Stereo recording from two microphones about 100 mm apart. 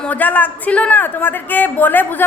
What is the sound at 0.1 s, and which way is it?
A woman's voice, 15° left (ahead or behind).